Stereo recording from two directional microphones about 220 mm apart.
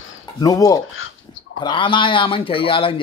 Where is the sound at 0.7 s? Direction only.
65° left (ahead or behind).